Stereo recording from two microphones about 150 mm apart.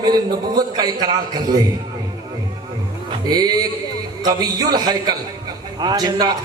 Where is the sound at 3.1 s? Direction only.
25° right (ahead or behind).